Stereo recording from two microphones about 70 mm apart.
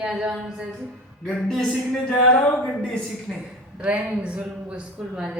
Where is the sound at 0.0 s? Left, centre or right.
Centre.